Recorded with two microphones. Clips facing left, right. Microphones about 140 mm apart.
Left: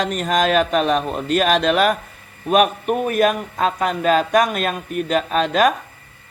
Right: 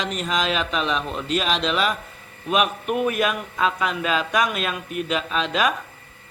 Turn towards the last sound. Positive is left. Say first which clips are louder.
# left 6 dB
turn(degrees=45)  # may be behind; listen again after turning